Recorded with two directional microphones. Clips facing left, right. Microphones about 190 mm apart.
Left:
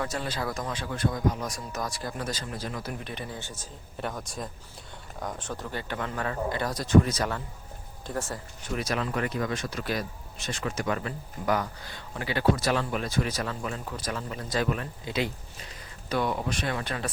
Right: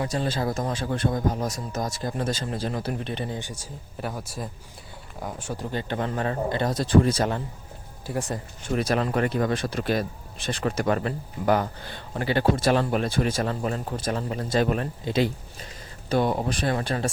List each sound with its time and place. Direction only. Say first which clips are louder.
0.1 s speech: right 5 dB; 30° right (ahead or behind); by 5.6 s 10° right (ahead or behind)
5.7 s speech: right 6 dB; 30° right (ahead or behind)
8.0 s speech: right 4 dB; 15° right (ahead or behind)
8.6 s speech: right 6 dB; 30° right (ahead or behind)